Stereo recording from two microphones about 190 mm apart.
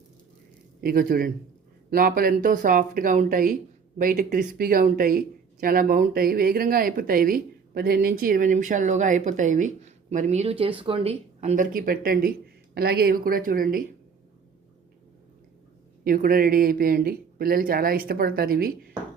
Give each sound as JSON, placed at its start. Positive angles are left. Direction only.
{"t": 0.8, "sound": "speech", "side_deg": -50}
{"t": 16.0, "sound": "speech", "side_deg": -50}